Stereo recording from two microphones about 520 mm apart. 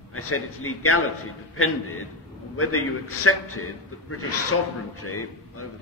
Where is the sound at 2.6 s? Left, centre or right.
Left.